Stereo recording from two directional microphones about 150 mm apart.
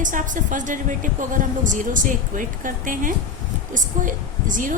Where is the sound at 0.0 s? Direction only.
60° right (ahead or behind).